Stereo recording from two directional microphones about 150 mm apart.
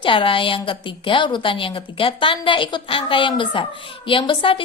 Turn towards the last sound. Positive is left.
turn(degrees=35)  # may be behind; listen again after turning